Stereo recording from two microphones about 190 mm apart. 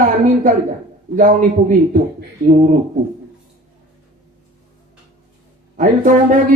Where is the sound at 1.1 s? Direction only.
40° right (ahead or behind).